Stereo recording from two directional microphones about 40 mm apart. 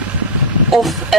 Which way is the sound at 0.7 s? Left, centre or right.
Centre.